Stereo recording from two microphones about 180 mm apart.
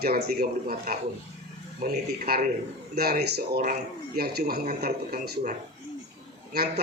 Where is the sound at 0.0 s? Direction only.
55° right (ahead or behind).